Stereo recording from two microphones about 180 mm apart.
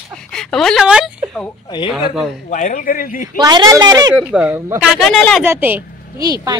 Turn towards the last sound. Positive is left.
turn(degrees=-20)  # may be behind; listen again after turning